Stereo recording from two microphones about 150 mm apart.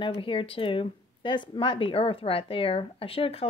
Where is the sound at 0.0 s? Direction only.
35° left (ahead or behind).